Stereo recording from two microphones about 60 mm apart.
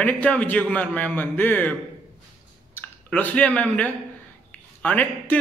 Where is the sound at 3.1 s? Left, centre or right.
Left.